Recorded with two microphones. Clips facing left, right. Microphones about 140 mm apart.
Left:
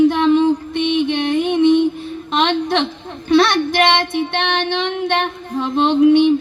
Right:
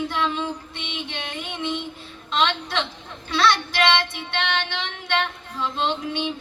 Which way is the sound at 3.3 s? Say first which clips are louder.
Left 8 dB; 50° left (ahead or behind).